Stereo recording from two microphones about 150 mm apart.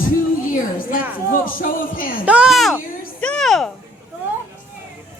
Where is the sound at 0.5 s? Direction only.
65° left (ahead or behind).